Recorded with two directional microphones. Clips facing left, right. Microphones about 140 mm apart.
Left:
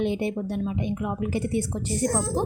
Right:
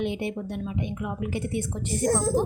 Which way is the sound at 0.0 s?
35° left (ahead or behind).